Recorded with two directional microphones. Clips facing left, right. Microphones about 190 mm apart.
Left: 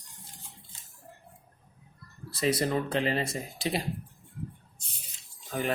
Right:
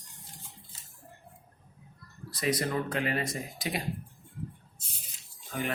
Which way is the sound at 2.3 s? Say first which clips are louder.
Left 3 dB; 30° left (ahead or behind).